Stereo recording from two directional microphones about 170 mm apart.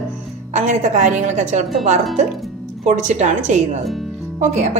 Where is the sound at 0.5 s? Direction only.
45° right (ahead or behind).